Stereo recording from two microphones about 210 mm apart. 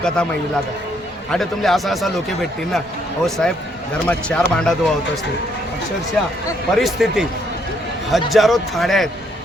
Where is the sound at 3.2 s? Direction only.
Centre (ahead or behind).